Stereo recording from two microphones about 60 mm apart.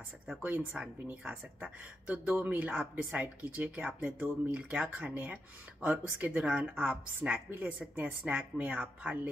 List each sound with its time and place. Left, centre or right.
0.8 s speech: centre